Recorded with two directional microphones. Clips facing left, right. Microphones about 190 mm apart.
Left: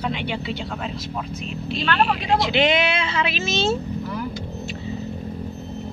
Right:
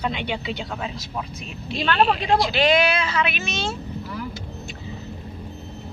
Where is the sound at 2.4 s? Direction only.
20° left (ahead or behind).